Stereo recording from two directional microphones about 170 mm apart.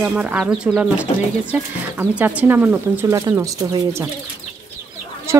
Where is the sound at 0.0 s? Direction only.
5° right (ahead or behind).